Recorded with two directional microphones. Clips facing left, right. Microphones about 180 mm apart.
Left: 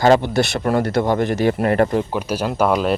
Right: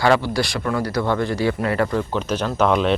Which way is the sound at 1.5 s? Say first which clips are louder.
Left 4 dB; 55° left (ahead or behind).